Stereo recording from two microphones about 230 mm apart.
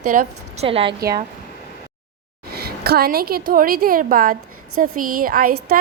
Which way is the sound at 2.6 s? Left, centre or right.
Right.